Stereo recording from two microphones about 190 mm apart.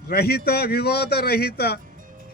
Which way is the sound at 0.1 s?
55° left (ahead or behind).